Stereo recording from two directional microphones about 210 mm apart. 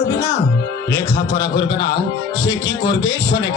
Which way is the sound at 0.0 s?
15° left (ahead or behind).